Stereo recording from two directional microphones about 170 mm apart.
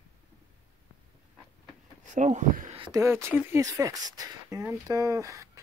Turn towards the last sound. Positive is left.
turn(degrees=-20)  # may be behind; listen again after turning